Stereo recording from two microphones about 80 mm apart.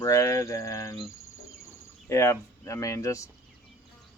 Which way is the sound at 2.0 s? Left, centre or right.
Left.